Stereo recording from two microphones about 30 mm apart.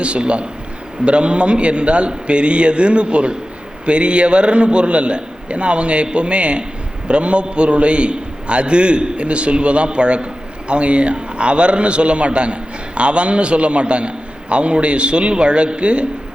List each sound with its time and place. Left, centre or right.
0.0 s a man's voice: right